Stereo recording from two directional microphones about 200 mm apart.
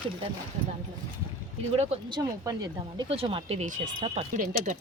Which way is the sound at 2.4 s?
20° right (ahead or behind).